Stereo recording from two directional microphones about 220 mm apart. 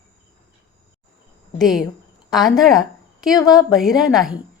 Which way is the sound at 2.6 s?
Centre (ahead or behind).